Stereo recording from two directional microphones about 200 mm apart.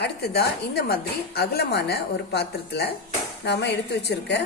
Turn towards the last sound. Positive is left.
turn(degrees=55)  # may be behind; listen again after turning